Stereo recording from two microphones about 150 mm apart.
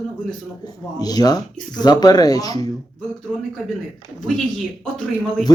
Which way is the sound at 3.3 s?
5° left (ahead or behind).